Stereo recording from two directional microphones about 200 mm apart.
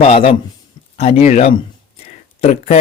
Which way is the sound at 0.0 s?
30° left (ahead or behind).